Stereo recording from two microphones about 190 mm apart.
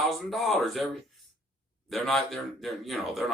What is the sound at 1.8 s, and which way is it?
Speech, centre (ahead or behind).